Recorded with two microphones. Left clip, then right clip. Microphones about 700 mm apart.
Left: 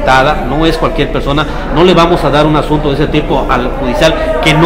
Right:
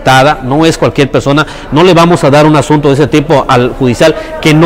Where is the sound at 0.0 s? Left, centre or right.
Right.